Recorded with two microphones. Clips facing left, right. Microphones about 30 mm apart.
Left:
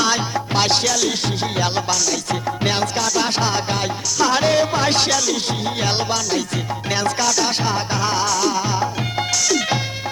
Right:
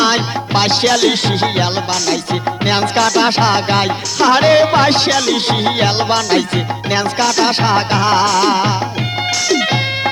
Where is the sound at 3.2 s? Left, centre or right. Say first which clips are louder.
Right 7 dB; right.